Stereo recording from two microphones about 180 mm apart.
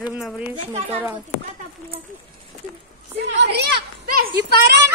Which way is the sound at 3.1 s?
65° right (ahead or behind).